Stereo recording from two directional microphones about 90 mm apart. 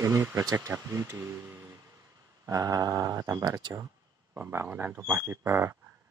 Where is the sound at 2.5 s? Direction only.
40° right (ahead or behind).